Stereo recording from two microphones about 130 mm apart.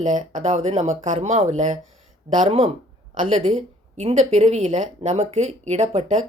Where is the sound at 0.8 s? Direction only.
70° right (ahead or behind).